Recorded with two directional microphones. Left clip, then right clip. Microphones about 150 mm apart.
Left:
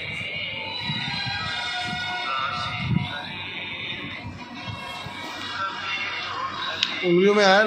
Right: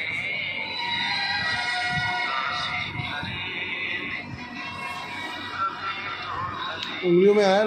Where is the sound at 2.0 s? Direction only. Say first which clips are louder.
Right 1 dB; 45° left (ahead or behind).